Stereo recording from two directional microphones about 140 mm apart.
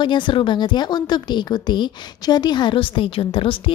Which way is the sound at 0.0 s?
35° left (ahead or behind).